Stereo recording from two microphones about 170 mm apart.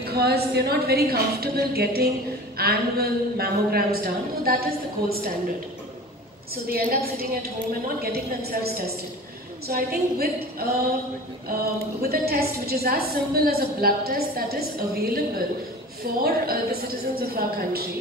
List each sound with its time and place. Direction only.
0.1 s a woman's voice: 70° right (ahead or behind)
6.7 s a woman's voice: 60° right (ahead or behind)
12.0 s a woman's voice: 65° right (ahead or behind)